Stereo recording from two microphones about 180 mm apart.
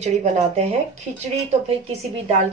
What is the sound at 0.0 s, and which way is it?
Speech, 40° right (ahead or behind).